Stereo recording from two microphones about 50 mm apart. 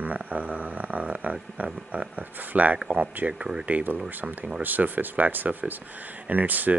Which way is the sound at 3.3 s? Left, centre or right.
Centre.